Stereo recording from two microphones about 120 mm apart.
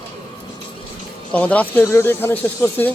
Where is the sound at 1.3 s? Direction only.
10° left (ahead or behind).